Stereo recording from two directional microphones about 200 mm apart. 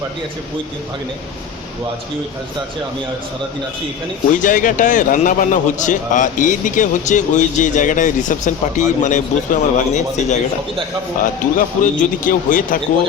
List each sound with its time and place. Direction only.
4.3 s a man's voice: 40° left (ahead or behind)